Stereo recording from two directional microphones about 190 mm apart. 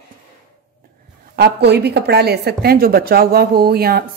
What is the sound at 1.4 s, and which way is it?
A woman's voice, 60° right (ahead or behind).